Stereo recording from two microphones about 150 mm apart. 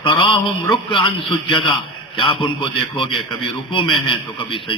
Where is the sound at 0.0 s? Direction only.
35° left (ahead or behind).